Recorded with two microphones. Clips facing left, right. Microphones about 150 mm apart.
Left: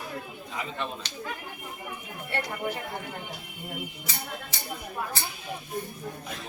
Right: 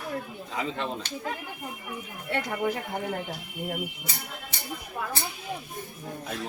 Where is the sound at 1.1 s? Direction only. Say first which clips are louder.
Right 5 dB; 50° right (ahead or behind).